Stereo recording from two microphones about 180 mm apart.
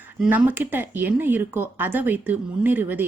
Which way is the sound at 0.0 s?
10° right (ahead or behind).